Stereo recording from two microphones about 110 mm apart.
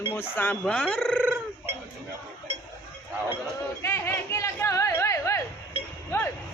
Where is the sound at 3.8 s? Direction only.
25° left (ahead or behind).